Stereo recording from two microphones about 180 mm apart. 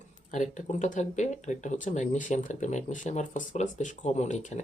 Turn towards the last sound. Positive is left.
turn(degrees=40)  # may be behind; listen again after turning